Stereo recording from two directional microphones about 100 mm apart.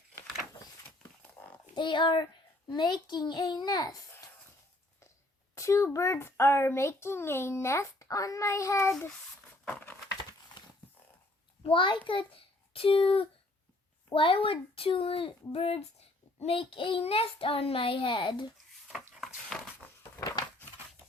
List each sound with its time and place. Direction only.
1.7 s a child's voice: 50° left (ahead or behind)
5.5 s a child's voice: 30° left (ahead or behind)
9.6 s a sound: 20° left (ahead or behind)
11.6 s a child's voice: 55° left (ahead or behind); by 15.8 s 75° left (ahead or behind)
16.4 s child singing: 75° left (ahead or behind); by 18.4 s 55° left (ahead or behind)
18.9 s a sound: centre (ahead or behind)